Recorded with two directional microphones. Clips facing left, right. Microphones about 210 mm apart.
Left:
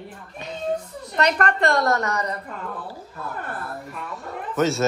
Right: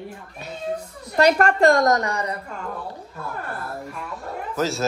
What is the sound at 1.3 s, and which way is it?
Speech, 40° right (ahead or behind).